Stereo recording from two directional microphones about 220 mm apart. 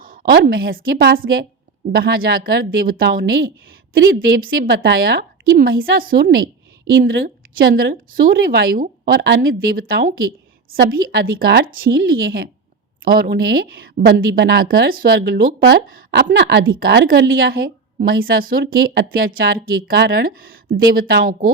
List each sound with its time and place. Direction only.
0.0 s a woman's voice: 40° right (ahead or behind)